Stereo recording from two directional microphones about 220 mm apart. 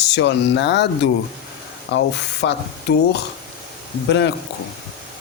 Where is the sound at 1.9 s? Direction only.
50° left (ahead or behind).